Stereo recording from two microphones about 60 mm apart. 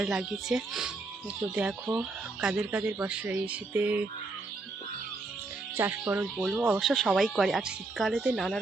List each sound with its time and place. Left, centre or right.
0.0 s speech: centre
1.4 s speech: right
2.7 s speech: right
5.7 s speech: right
6.6 s speech: centre
6.8 s speech: centre